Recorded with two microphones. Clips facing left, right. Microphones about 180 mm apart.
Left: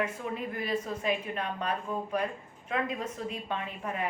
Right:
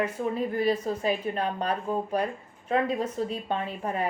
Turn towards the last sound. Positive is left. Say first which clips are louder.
# right 5 dB
turn(degrees=-35)  # may be behind; listen again after turning